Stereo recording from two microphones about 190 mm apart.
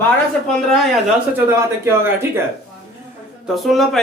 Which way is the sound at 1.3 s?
10° right (ahead or behind).